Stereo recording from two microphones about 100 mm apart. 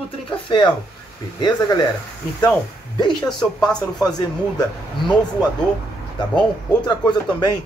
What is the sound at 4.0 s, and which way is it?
Speech, 45° left (ahead or behind).